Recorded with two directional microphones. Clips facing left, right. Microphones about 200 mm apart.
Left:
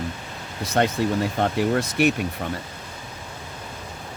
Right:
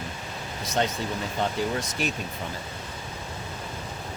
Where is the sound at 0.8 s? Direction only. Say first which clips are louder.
Left 7 dB; 55° left (ahead or behind).